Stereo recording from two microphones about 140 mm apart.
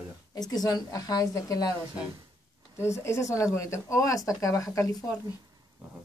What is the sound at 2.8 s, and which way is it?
Speech, 20° left (ahead or behind).